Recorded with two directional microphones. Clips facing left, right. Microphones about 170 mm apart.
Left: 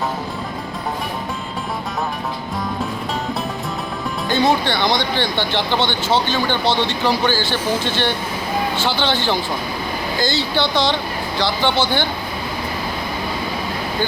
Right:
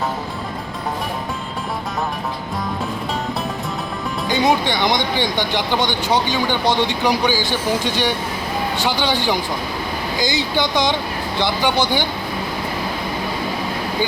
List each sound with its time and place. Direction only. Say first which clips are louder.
4.3 s speech: even; 15° right (ahead or behind)